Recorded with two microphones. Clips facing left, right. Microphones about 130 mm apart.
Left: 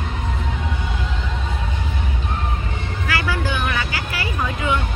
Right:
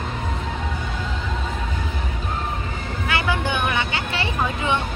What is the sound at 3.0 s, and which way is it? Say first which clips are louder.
Vehicle: even; 25° right (ahead or behind).